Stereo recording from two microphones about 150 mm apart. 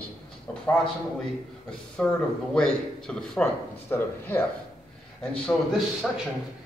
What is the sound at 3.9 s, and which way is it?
Speech, 15° left (ahead or behind).